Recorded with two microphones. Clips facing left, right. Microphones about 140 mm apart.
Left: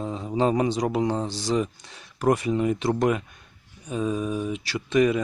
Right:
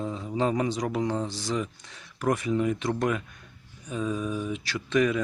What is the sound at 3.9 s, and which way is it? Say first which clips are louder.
Mantra: left 3 dB; 20° left (ahead or behind).